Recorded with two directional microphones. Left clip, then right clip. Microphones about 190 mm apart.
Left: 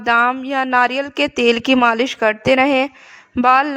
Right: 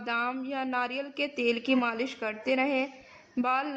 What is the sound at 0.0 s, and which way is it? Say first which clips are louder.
Speech: left 16 dB; 50° left (ahead or behind).